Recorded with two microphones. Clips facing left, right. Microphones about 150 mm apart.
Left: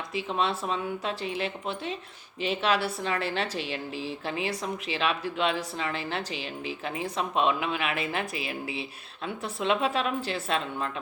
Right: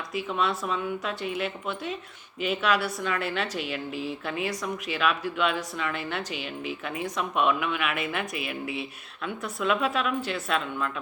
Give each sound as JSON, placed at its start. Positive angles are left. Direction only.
{"t": 0.1, "sound": "a woman's voice", "side_deg": 30}